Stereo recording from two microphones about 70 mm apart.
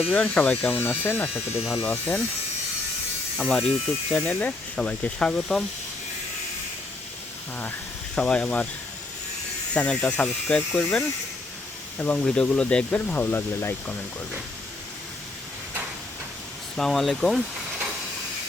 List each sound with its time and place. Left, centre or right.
0.1 s speech: centre
3.3 s speech: centre
4.1 s speech: left
8.1 s speech: centre
9.7 s speech: centre
11.9 s speech: centre; by 13.9 s left
16.7 s speech: centre